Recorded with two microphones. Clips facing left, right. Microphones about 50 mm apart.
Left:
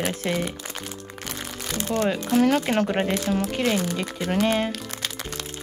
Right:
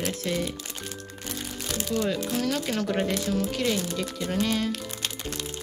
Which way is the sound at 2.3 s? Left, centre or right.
Left.